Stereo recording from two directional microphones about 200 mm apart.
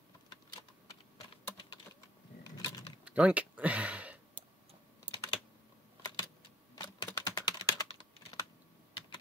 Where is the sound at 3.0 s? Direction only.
5° right (ahead or behind).